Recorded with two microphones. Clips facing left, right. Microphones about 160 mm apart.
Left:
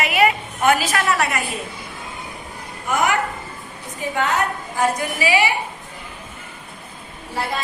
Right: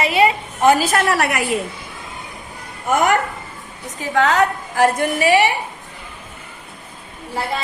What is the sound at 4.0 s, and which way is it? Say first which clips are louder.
Speech: right 5 dB; 90° right.